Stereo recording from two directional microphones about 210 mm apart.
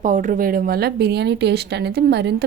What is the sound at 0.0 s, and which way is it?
Speech, 35° right (ahead or behind).